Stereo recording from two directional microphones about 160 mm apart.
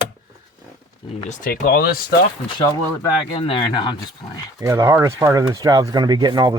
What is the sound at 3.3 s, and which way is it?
Speech, 35° left (ahead or behind).